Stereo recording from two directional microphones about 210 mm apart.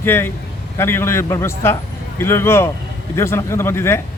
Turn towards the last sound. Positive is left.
turn(degrees=10)  # may be behind; listen again after turning